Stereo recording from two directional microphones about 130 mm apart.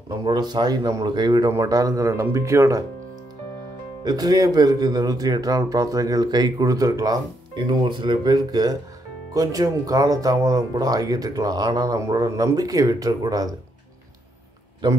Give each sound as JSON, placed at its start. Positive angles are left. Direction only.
{"t": 0.1, "sound": "speech", "side_deg": -35}
{"t": 4.0, "sound": "speech", "side_deg": -30}